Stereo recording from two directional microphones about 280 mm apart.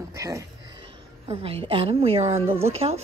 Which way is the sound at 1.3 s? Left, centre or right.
Centre.